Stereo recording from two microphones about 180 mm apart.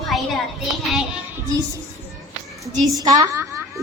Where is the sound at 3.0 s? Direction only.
20° right (ahead or behind).